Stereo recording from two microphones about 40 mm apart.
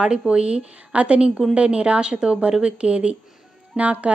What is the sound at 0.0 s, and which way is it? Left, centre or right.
A woman's voice, right.